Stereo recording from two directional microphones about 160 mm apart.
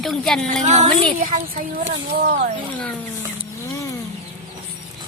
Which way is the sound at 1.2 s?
55° right (ahead or behind).